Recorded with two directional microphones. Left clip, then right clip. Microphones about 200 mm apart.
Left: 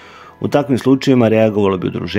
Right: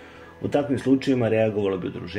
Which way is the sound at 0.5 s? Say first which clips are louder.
Left 8 dB; 40° left (ahead or behind).